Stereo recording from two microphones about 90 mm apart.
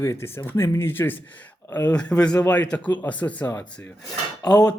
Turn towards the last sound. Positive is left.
turn(degrees=45)  # may be behind; listen again after turning